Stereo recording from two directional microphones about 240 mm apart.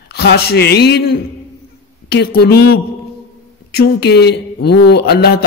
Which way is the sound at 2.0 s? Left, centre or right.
Left.